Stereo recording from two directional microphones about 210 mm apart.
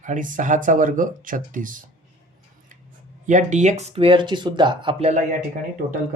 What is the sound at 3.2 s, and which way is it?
Speech, 35° right (ahead or behind).